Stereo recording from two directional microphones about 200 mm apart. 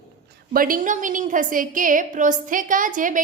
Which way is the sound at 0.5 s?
45° right (ahead or behind).